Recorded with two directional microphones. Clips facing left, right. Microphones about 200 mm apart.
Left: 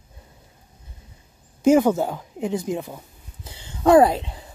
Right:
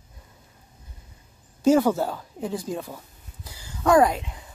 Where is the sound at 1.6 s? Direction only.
15° left (ahead or behind).